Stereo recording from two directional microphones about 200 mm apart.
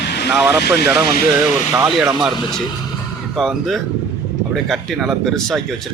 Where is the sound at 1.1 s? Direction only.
45° left (ahead or behind).